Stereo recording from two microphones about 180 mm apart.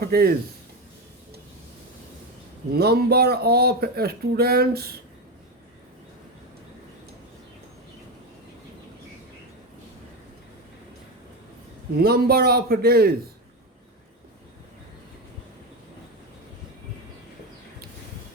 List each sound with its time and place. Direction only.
0.0 s speech: 60° right (ahead or behind)
2.7 s speech: 60° right (ahead or behind)
11.9 s speech: 60° right (ahead or behind)